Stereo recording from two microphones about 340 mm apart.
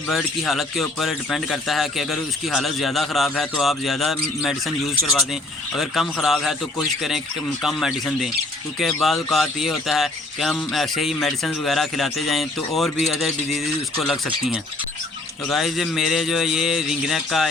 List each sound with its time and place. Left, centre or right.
0.1 s speech: centre